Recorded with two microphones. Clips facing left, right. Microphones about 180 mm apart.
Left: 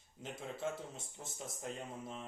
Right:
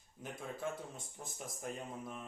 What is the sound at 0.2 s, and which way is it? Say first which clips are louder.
Speech: left 1 dB; 25° left (ahead or behind).